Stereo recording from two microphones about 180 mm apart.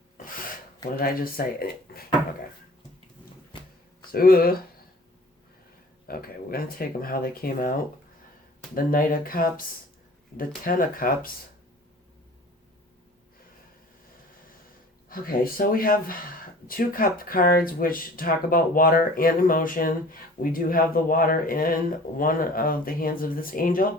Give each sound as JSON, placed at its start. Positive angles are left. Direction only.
{"t": 0.9, "sound": "speech", "side_deg": 55}
{"t": 4.1, "sound": "speech", "side_deg": 55}
{"t": 6.1, "sound": "speech", "side_deg": 55}
{"t": 15.1, "sound": "speech", "side_deg": 50}